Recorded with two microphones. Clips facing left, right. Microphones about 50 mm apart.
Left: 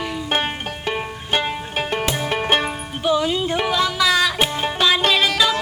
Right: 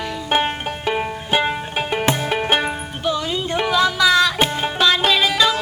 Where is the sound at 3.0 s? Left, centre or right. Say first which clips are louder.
Left 3 dB; centre.